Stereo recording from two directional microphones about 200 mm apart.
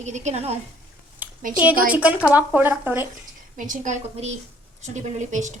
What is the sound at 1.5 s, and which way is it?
Speech, 5° right (ahead or behind).